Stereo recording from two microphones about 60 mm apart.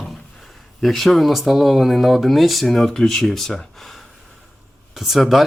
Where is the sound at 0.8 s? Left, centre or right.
Centre.